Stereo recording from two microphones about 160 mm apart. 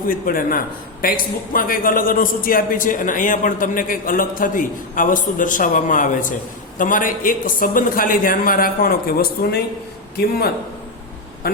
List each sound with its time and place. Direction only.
0.1 s a man's voice: 60° left (ahead or behind)
11.4 s speech: 75° left (ahead or behind)